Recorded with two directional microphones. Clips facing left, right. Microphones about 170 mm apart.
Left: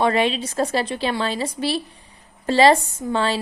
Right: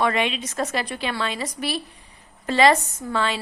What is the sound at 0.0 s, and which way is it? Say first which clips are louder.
A woman's voice: left 4 dB; 35° left (ahead or behind).